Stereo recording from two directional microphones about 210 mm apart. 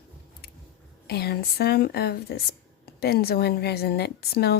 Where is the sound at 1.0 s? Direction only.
50° left (ahead or behind).